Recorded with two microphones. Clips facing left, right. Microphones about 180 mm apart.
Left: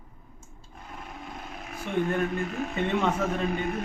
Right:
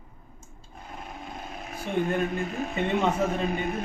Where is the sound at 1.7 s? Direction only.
35° right (ahead or behind).